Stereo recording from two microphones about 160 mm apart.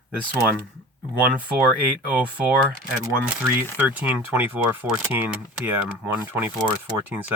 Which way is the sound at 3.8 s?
10° right (ahead or behind).